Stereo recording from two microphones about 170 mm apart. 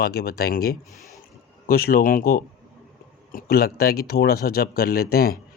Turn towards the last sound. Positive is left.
turn(degrees=60)  # may be behind; listen again after turning